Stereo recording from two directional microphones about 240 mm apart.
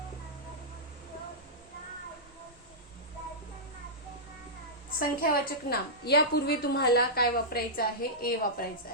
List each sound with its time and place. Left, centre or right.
4.9 s a woman's voice: left